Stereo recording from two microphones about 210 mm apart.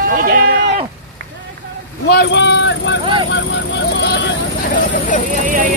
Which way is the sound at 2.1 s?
55° left (ahead or behind).